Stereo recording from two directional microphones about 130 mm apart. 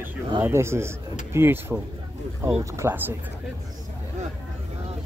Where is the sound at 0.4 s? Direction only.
20° right (ahead or behind).